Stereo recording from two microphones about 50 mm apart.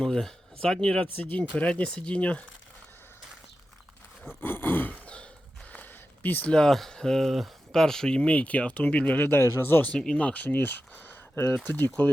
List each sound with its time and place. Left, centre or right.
0.0 s speech: centre
1.0 s speech: left
4.4 s a sound: left
5.0 s a sound: left
6.5 s speech: centre
7.3 s speech: centre
7.8 s speech: centre; by 9.2 s left
9.2 s speech: left
9.9 s speech: centre
10.4 s speech: left